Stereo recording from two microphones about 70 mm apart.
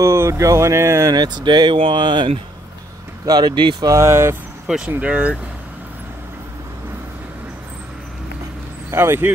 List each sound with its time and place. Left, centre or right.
0.0 s speech: right
1.1 s speech: right
3.3 s speech: right
3.9 s speech: right
4.7 s speech: centre
8.9 s speech: right